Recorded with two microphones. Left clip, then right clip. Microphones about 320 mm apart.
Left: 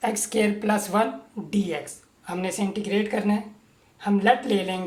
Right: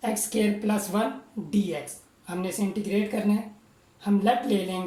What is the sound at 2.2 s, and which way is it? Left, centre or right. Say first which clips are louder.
Speech: left 3 dB; left.